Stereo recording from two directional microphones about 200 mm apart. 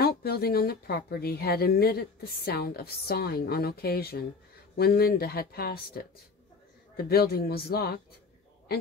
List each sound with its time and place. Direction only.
0.0 s speech: 50° left (ahead or behind)